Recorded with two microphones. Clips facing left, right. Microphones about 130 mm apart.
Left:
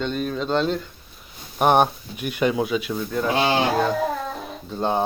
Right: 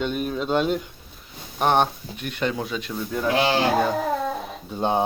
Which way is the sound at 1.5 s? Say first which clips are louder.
Left 3 dB; 10° left (ahead or behind).